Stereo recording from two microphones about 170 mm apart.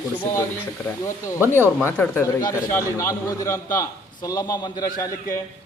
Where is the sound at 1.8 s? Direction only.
10° left (ahead or behind).